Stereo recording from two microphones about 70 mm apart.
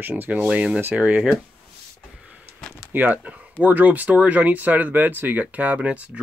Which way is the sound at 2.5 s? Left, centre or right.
Centre.